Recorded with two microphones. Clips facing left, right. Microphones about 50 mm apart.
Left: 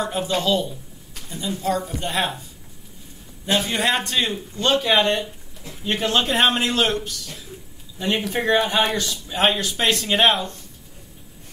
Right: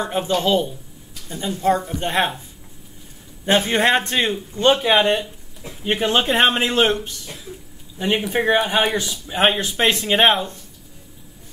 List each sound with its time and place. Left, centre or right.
0.0 s a man's voice: right
3.4 s a man's voice: right